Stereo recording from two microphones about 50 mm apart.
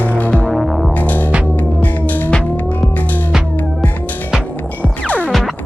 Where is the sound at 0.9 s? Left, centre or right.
Left.